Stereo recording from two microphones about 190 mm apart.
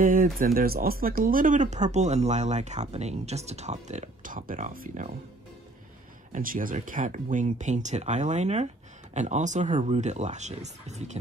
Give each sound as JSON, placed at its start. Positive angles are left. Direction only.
{"t": 0.0, "sound": "speech", "side_deg": -45}
{"t": 6.3, "sound": "speech", "side_deg": -45}